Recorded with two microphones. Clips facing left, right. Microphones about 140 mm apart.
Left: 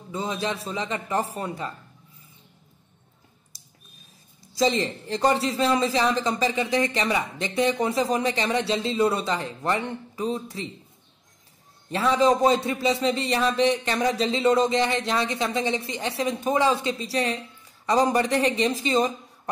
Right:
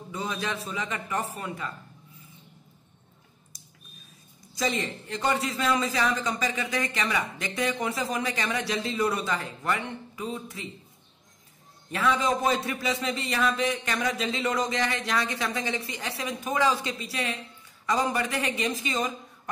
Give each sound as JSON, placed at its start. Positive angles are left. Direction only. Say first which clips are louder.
{"t": 0.1, "sound": "a man's voice", "louder": "left 4 dB", "side_deg": 25}
{"t": 4.6, "sound": "a man's voice", "louder": "left 6 dB", "side_deg": 30}
{"t": 11.9, "sound": "a man's voice", "louder": "left 5 dB", "side_deg": 30}